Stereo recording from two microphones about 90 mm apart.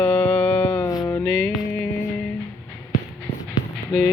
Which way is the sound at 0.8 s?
50° left (ahead or behind).